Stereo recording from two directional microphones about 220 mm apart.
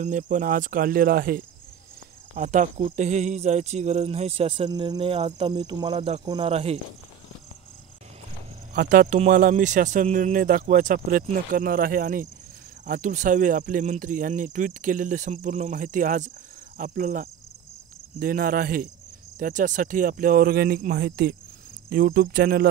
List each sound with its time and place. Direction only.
0.0 s speech: 35° right (ahead or behind)
8.7 s speech: 35° right (ahead or behind)
21.8 s cricket: 45° right (ahead or behind)